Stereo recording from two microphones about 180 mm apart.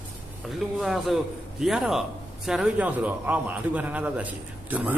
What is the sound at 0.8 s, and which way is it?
A man's voice, centre (ahead or behind).